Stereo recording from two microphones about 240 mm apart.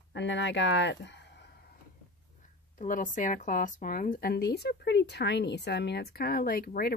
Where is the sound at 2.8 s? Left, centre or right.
Left.